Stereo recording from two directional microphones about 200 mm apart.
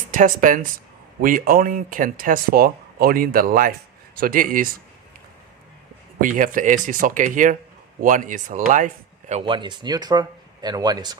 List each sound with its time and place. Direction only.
0.1 s speech: 40° right (ahead or behind)
6.1 s speech: 40° right (ahead or behind)
9.3 s speech: 25° right (ahead or behind)